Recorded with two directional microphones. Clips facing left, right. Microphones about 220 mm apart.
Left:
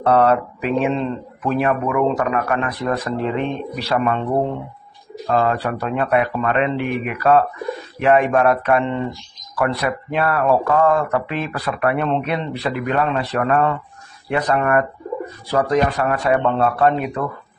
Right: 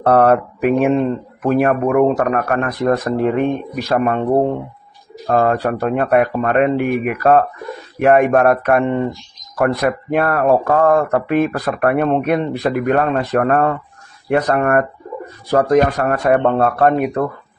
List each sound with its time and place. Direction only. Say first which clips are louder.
0.0 s speech: right 3 dB; 50° right (ahead or behind)
16.0 s speech: right 3 dB; 45° right (ahead or behind)